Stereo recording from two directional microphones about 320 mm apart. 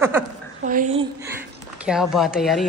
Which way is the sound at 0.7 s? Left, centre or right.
Right.